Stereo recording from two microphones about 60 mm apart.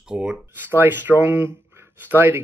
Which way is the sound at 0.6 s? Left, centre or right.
Right.